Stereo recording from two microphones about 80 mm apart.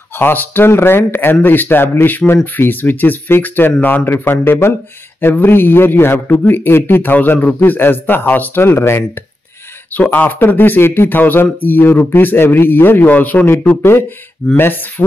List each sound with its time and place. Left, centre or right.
0.1 s speech: left